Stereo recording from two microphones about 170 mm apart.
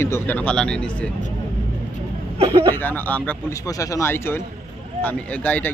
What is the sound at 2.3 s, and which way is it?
Speech, 30° right (ahead or behind).